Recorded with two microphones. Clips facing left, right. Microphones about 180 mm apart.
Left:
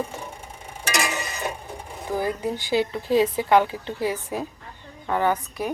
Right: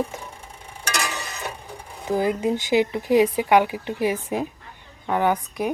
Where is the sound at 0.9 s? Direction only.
10° left (ahead or behind).